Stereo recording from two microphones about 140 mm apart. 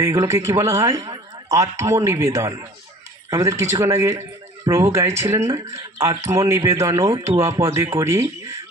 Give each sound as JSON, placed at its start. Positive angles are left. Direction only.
{"t": 0.0, "sound": "speech", "side_deg": -20}